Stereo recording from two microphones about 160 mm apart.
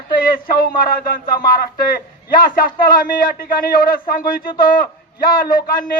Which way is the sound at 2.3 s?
65° left (ahead or behind).